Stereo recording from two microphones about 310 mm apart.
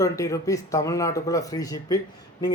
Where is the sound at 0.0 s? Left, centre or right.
Centre.